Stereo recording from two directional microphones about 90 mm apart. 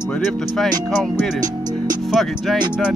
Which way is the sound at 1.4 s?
50° right (ahead or behind).